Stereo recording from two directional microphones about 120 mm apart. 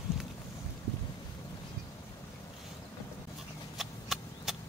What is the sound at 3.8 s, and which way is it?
Vehicle, centre (ahead or behind).